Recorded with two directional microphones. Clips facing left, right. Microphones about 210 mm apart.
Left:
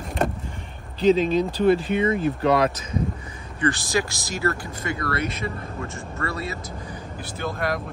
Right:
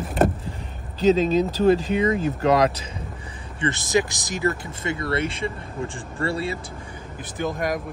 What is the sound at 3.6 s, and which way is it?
Speech, 20° right (ahead or behind).